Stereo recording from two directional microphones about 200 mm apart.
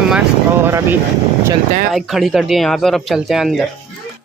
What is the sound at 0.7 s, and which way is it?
Speech, 10° right (ahead or behind).